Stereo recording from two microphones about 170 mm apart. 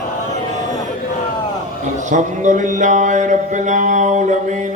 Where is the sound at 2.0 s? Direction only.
45° right (ahead or behind).